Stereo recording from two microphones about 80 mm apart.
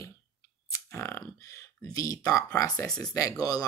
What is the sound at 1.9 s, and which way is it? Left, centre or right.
Speech, left.